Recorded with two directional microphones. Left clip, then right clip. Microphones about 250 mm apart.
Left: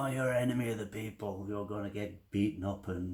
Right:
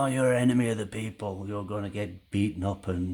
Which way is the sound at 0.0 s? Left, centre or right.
Right.